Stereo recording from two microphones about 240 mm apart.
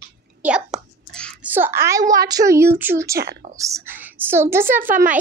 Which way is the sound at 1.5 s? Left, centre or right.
Centre.